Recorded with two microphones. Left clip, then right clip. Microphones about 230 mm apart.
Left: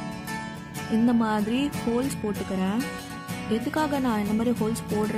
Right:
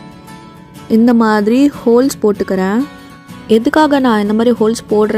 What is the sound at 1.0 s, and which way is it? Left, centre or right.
A woman's voice, right.